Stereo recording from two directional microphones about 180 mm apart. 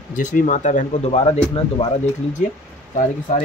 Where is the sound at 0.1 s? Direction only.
45° left (ahead or behind); by 2.0 s 30° left (ahead or behind).